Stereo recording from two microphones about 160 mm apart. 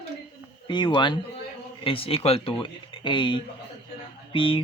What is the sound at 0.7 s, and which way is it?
Speech, 30° left (ahead or behind).